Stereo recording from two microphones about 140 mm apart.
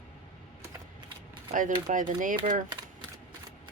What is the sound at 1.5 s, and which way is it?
Speech, 70° right (ahead or behind).